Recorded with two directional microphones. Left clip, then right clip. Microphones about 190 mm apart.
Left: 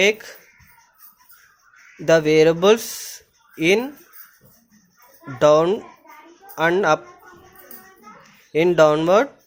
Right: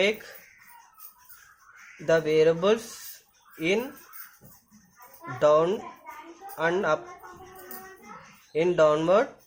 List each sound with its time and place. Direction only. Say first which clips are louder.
0.0 s speech: left 7 dB; 40° left (ahead or behind)
2.0 s speech: left 7 dB; 40° left (ahead or behind)
5.4 s speech: left 6 dB; 40° left (ahead or behind)
8.5 s speech: left 6 dB; 40° left (ahead or behind)